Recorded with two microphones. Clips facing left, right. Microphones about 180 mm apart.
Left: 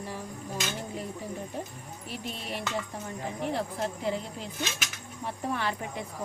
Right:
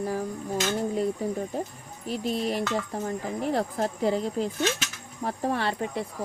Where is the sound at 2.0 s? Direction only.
40° right (ahead or behind).